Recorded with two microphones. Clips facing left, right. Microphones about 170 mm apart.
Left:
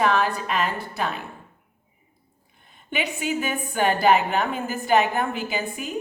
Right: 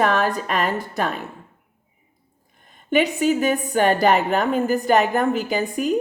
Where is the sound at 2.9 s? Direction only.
40° right (ahead or behind).